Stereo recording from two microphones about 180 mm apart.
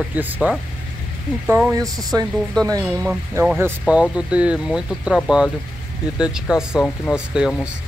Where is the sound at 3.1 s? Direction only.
10° right (ahead or behind).